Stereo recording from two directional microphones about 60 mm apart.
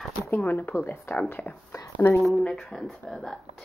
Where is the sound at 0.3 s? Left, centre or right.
Left.